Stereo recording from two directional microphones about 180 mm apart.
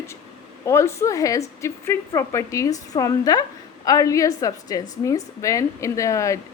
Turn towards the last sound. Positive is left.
turn(degrees=15)  # may be behind; listen again after turning